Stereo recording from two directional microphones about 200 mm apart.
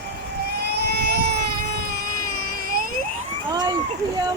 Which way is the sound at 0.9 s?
55° right (ahead or behind).